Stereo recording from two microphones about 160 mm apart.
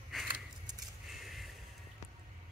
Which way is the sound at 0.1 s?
Centre (ahead or behind).